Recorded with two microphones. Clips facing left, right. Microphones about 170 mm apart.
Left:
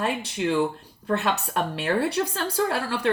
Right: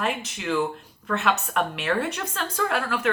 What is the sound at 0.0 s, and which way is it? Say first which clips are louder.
Speech: left 3 dB; 30° left (ahead or behind).